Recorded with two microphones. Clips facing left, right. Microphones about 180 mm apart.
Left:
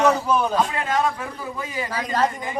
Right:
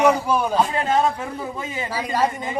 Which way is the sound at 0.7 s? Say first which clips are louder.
Right 3 dB; 30° right (ahead or behind).